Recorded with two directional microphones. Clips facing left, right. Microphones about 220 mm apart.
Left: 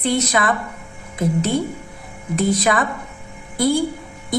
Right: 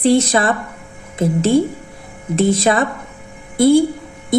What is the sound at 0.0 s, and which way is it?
A woman's voice, 30° right (ahead or behind).